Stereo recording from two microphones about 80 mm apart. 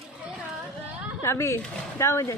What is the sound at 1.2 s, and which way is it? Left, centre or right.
Speech, left.